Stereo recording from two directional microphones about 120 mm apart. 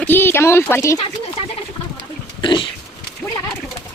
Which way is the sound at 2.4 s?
40° left (ahead or behind).